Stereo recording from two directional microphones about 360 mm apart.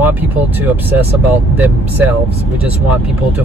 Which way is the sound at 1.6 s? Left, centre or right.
Centre.